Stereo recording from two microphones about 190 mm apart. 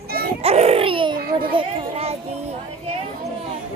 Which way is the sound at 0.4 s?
35° right (ahead or behind).